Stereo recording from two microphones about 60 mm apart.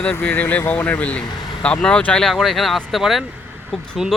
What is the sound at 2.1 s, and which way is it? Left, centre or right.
Speech, centre.